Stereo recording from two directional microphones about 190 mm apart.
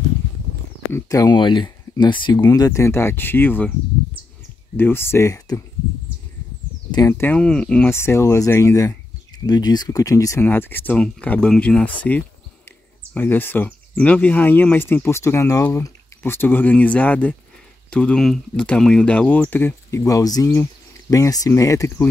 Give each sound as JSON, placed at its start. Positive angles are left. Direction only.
{"t": 0.9, "sound": "speech", "side_deg": 15}
{"t": 4.7, "sound": "speech", "side_deg": 10}
{"t": 6.9, "sound": "speech", "side_deg": 15}